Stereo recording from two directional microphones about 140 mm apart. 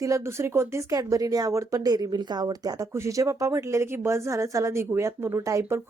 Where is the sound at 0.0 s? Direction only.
20° right (ahead or behind).